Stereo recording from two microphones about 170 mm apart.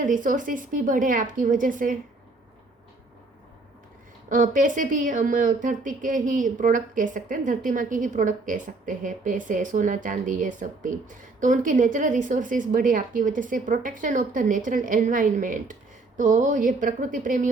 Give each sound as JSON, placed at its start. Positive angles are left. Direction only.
{"t": 0.0, "sound": "speech", "side_deg": -50}
{"t": 4.3, "sound": "speech", "side_deg": -50}